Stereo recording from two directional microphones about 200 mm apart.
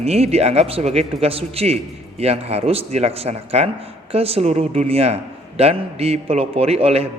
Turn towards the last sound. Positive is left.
turn(degrees=-30)  # may be behind; listen again after turning